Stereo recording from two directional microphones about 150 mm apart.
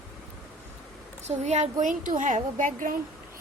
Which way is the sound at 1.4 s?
50° right (ahead or behind).